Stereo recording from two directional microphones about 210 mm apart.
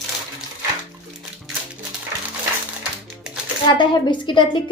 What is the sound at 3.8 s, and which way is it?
Speech, 20° left (ahead or behind).